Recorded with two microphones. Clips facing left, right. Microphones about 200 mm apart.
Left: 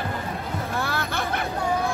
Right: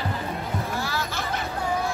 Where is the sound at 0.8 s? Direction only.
60° left (ahead or behind).